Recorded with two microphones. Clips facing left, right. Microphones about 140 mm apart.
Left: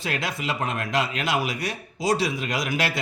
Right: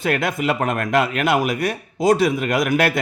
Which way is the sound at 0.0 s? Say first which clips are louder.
Right 8 dB; 55° right (ahead or behind).